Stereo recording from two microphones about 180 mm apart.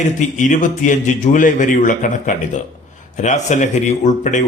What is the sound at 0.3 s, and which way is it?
A man's voice, 45° left (ahead or behind).